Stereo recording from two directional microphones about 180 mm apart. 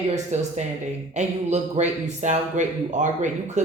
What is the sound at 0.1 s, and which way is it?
Speech, 40° right (ahead or behind).